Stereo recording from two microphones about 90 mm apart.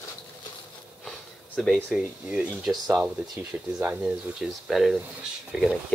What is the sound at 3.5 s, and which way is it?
Speech, 25° right (ahead or behind).